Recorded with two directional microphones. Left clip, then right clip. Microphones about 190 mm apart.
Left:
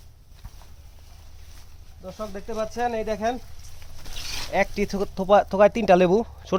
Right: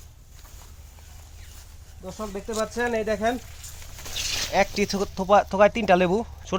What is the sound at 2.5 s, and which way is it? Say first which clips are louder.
Speech: right 1 dB; 35° left (ahead or behind).